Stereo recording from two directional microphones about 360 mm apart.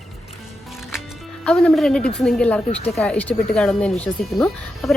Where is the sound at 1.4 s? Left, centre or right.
Centre.